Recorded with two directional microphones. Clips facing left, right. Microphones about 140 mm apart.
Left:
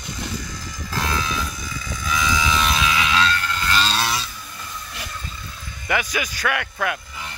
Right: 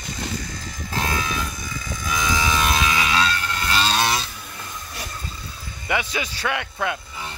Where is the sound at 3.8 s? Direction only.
50° right (ahead or behind).